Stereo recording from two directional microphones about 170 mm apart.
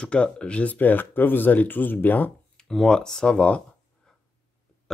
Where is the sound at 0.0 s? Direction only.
5° left (ahead or behind).